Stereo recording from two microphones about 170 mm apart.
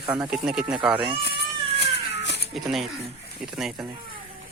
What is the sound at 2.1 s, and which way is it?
Cat, 90° left.